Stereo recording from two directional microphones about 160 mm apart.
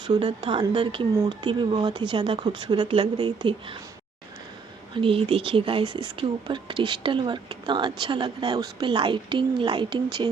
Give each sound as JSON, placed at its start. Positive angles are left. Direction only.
{"t": 0.1, "sound": "speech", "side_deg": -30}
{"t": 4.9, "sound": "speech", "side_deg": -35}